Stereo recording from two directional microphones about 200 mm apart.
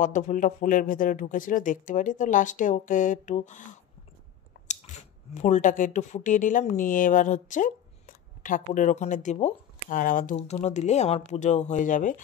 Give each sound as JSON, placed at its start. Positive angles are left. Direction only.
{"t": 0.0, "sound": "speech", "side_deg": 40}